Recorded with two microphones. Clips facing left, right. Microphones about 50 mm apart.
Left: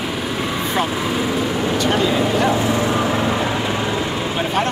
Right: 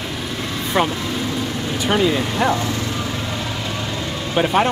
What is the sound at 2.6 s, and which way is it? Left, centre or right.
Vehicle, centre.